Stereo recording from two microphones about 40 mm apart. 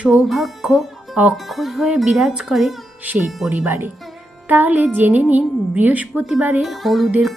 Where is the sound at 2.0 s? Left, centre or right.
Centre.